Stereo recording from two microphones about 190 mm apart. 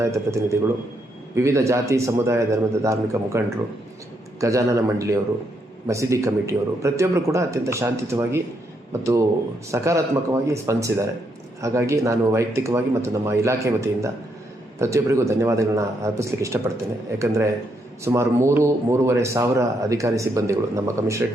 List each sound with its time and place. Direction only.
0.0 s a man's voice: 15° right (ahead or behind)